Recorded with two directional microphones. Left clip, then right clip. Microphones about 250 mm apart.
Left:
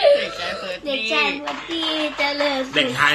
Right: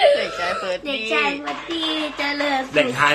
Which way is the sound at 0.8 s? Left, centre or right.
Centre.